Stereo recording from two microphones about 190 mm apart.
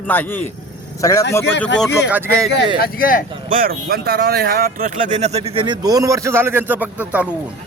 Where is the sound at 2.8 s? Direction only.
45° left (ahead or behind).